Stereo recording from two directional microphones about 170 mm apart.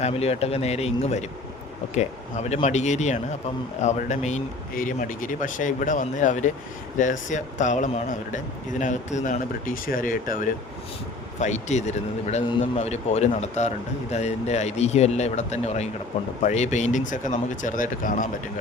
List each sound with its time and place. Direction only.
0.0 s a man's voice: 35° left (ahead or behind)